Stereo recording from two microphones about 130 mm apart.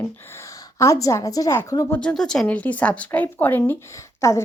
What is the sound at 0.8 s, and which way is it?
A woman's voice, 25° left (ahead or behind).